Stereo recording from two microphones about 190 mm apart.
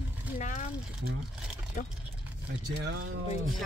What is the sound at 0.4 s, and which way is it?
Speech, 40° left (ahead or behind).